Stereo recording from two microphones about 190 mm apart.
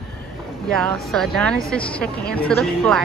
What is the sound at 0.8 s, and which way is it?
Speech, 5° left (ahead or behind).